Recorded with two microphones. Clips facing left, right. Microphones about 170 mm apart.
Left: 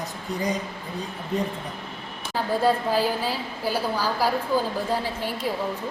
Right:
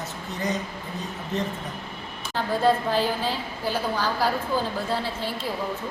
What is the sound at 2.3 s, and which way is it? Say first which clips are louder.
A woman's voice: even; 10° left (ahead or behind).